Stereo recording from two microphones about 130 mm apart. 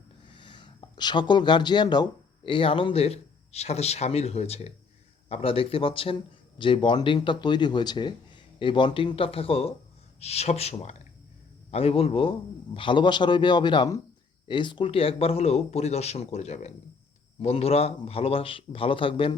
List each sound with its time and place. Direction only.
0.3 s speech: 40° left (ahead or behind)